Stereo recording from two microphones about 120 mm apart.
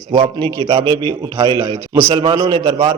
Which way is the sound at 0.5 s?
45° right (ahead or behind).